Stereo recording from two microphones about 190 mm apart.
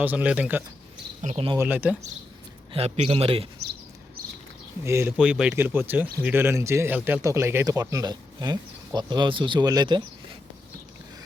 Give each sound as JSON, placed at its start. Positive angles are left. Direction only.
{"t": 0.0, "sound": "speech", "side_deg": -10}
{"t": 1.2, "sound": "a man's voice", "side_deg": -35}
{"t": 1.5, "sound": "speech", "side_deg": -10}
{"t": 2.7, "sound": "a man's voice", "side_deg": -35}
{"t": 3.6, "sound": "a sound", "side_deg": -60}
{"t": 4.8, "sound": "speech", "side_deg": -15}